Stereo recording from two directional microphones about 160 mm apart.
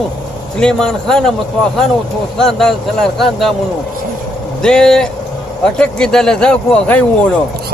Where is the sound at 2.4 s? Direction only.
Centre (ahead or behind).